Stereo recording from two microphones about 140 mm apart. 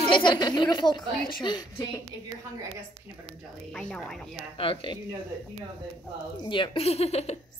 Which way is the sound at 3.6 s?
5° left (ahead or behind).